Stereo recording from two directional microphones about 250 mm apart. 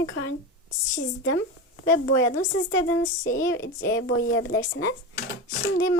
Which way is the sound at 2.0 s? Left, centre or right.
Left.